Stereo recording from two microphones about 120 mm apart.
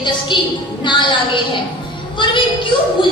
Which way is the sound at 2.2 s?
40° left (ahead or behind).